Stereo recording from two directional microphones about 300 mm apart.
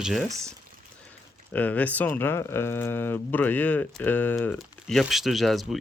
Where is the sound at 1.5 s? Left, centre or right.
Centre.